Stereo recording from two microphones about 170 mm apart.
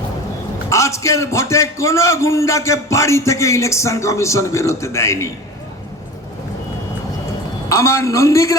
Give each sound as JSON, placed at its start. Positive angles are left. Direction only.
{"t": 0.7, "sound": "a man's voice", "side_deg": 15}
{"t": 7.7, "sound": "a man's voice", "side_deg": 15}